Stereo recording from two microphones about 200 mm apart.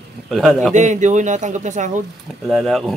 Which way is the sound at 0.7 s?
35° right (ahead or behind).